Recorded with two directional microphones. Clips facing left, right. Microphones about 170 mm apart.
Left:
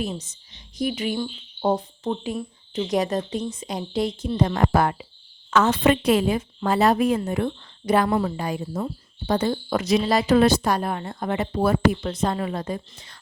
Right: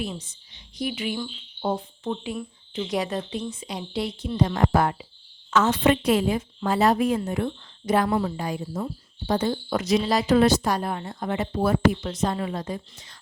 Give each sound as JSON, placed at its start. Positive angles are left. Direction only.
{"t": 0.0, "sound": "a woman's voice", "side_deg": 45}